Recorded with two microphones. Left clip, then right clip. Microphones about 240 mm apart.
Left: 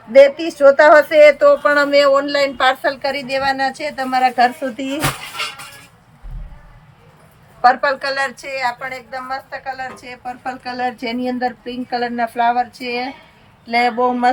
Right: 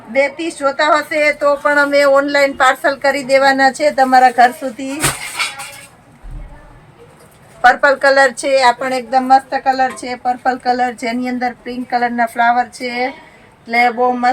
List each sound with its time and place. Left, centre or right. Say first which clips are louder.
0.2 s speech: left 6 dB; centre
2.0 s a woman's voice: right 2 dB; centre
7.6 s a woman's voice: right 4 dB; centre